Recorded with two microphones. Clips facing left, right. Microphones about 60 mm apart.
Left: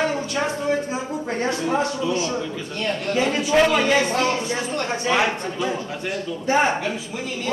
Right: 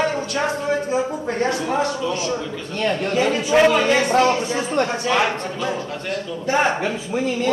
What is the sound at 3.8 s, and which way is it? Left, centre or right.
Speech, right.